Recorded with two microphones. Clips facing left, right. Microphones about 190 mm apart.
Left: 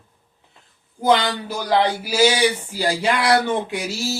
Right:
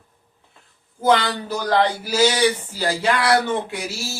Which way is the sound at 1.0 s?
15° left (ahead or behind).